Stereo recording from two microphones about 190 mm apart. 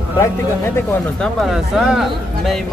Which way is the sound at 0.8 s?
10° left (ahead or behind).